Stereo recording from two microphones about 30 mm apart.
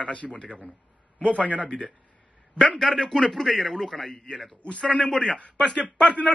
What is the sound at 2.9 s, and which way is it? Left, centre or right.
Speech, centre.